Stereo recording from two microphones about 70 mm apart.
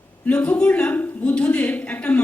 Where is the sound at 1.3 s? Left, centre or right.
Centre.